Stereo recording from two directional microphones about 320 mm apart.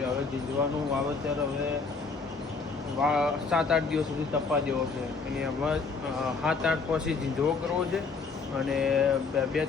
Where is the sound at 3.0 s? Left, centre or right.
Centre.